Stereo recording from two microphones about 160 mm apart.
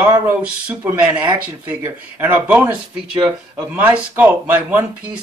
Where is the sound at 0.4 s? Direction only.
10° right (ahead or behind).